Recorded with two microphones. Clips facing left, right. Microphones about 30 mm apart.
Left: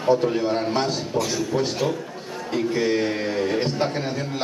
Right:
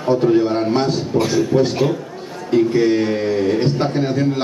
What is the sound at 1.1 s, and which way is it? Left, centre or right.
Speech, right.